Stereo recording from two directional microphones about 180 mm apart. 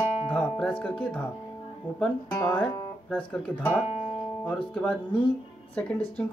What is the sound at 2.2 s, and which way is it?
Speech, 15° left (ahead or behind).